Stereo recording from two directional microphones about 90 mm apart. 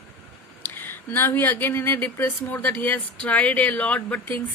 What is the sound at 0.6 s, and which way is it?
Speech, 25° left (ahead or behind).